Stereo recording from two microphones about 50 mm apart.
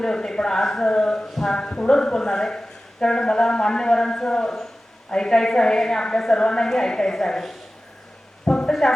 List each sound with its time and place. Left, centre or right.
0.0 s speech: centre
1.5 s speech: centre
8.4 s a sound: centre